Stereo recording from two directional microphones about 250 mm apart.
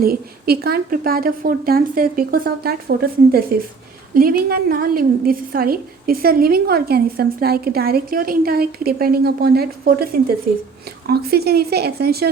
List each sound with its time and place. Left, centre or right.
0.0 s a woman's voice: right